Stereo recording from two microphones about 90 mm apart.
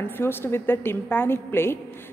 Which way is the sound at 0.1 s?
25° left (ahead or behind).